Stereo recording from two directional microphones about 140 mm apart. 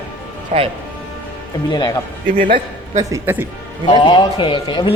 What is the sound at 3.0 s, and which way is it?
Speech, 25° right (ahead or behind).